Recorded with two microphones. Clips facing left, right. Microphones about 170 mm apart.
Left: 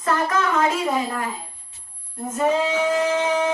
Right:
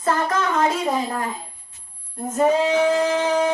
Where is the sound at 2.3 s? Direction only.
35° right (ahead or behind).